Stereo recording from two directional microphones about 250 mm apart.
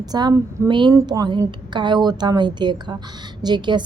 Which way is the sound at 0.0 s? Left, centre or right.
Centre.